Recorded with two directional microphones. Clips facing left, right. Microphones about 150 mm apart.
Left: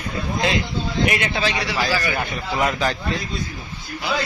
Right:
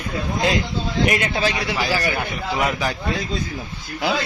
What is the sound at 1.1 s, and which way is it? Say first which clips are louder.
Speech: right 1 dB; 45° right (ahead or behind).